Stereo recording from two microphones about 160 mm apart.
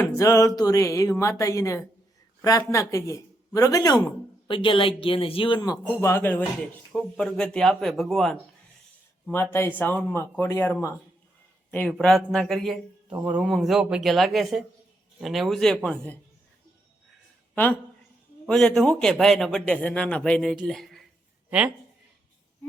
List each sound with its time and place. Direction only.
0.0 s speech: 20° left (ahead or behind)
5.8 s a man's voice: 15° left (ahead or behind)
9.3 s a man's voice: 15° left (ahead or behind)
17.5 s a man's voice: 10° left (ahead or behind)
20.7 s a sound: centre (ahead or behind)